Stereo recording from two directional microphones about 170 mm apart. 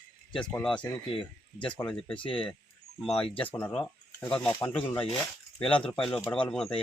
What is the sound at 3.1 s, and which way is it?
Speech, 35° left (ahead or behind).